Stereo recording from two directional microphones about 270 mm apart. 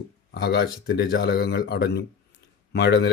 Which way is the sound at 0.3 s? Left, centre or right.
Left.